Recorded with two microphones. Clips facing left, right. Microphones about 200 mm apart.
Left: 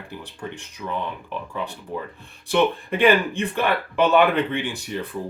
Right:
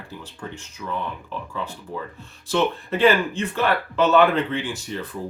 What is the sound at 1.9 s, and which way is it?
Speech, 20° left (ahead or behind).